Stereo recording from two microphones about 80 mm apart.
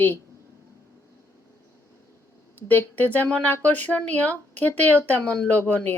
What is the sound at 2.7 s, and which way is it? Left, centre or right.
Speech, left.